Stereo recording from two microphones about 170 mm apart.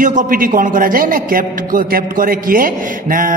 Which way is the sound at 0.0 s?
50° right (ahead or behind).